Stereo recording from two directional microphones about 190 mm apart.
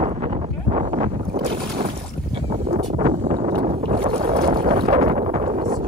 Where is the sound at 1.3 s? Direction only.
30° right (ahead or behind).